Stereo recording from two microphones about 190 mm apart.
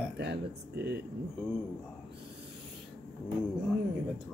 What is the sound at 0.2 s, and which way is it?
Speech, 60° right (ahead or behind).